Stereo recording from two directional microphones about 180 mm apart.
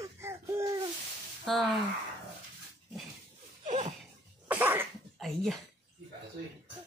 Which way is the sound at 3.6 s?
40° right (ahead or behind).